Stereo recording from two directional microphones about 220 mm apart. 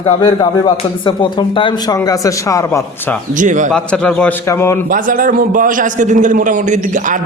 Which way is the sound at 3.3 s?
35° right (ahead or behind).